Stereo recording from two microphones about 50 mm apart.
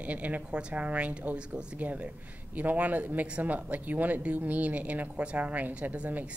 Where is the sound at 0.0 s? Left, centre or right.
Right.